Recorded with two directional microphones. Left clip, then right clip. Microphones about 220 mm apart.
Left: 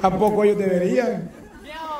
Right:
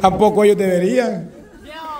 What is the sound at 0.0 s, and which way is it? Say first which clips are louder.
A man's voice: right 5 dB; 30° right (ahead or behind).